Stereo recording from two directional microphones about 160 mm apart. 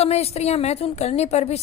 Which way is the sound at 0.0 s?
40° left (ahead or behind).